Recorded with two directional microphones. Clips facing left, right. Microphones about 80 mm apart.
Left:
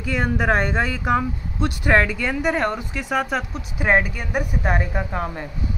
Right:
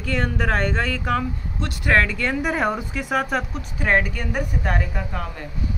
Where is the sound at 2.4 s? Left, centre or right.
Centre.